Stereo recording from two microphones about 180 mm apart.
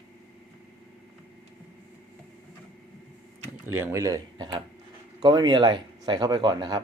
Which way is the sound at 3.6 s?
10° right (ahead or behind).